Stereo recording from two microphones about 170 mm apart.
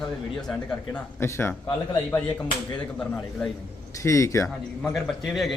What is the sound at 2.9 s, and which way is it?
Speech, 5° left (ahead or behind).